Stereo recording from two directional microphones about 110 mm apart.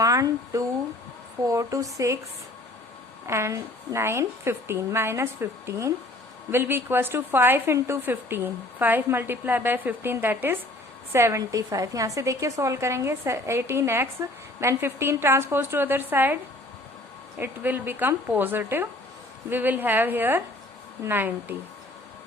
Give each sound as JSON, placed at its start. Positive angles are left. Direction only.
{"t": 0.0, "sound": "a woman's voice", "side_deg": -30}
{"t": 3.2, "sound": "a woman's voice", "side_deg": -25}
{"t": 17.4, "sound": "a woman's voice", "side_deg": -20}